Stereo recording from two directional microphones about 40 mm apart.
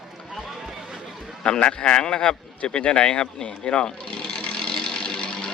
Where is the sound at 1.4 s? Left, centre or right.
Left.